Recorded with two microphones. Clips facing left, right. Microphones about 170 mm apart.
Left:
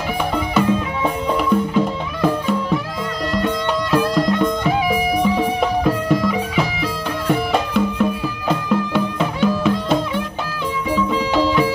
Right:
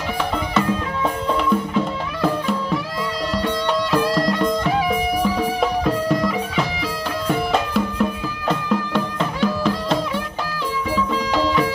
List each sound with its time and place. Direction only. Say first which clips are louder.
0.6 s music: left 3 dB; 5° left (ahead or behind)